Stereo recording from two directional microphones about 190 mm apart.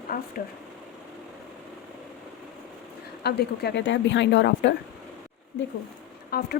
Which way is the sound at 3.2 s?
60° left (ahead or behind).